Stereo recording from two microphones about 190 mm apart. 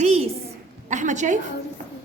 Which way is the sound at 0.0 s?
35° right (ahead or behind).